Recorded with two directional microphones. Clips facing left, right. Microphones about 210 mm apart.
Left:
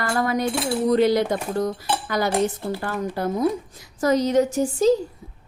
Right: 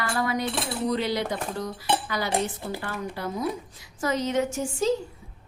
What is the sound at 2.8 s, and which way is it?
A woman's voice, 45° left (ahead or behind).